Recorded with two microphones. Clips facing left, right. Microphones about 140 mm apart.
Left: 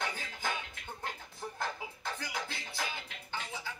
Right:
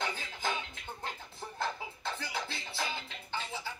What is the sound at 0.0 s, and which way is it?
Music, 50° left (ahead or behind).